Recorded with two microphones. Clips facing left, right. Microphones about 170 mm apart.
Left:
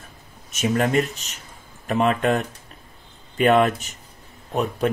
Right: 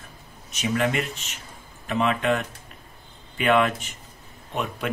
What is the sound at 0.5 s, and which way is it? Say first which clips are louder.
Speech: left 3 dB; 45° left (ahead or behind).